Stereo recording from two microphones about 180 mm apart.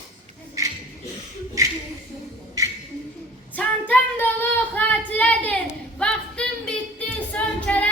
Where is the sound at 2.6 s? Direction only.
15° right (ahead or behind).